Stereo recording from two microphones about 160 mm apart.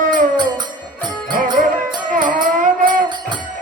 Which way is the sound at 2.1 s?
55° right (ahead or behind).